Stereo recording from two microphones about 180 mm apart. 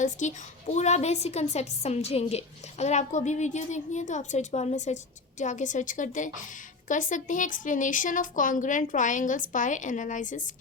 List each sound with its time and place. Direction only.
0.0 s a woman's voice: 40° left (ahead or behind)